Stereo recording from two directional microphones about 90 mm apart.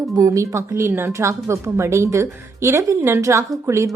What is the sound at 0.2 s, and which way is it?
Speech, 35° right (ahead or behind).